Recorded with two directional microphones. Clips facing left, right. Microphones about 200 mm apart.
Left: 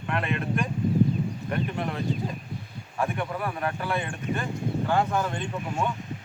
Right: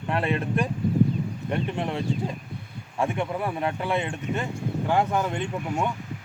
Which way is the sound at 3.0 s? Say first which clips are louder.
Right 2 dB; 25° right (ahead or behind).